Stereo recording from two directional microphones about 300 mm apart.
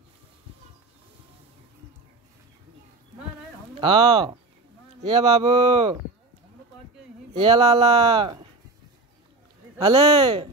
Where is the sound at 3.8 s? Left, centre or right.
Centre.